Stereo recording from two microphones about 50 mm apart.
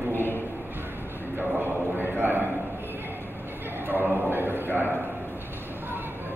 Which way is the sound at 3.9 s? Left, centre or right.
Right.